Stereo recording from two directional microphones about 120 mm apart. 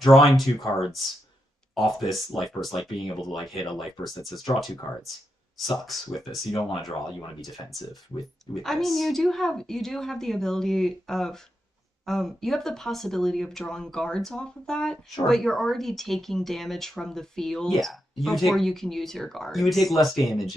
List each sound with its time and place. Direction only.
0.0 s speech: centre (ahead or behind)
4.9 s speech: 30° left (ahead or behind)
5.7 s speech: centre (ahead or behind)
8.6 s speech: centre (ahead or behind)